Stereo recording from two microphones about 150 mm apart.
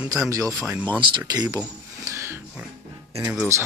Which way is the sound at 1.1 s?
25° right (ahead or behind).